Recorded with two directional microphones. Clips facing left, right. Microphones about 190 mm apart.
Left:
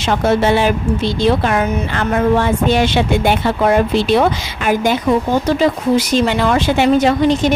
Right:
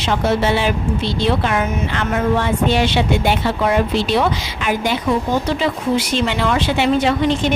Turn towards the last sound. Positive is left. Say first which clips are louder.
# left 4 dB
turn(degrees=40)  # may be behind; listen again after turning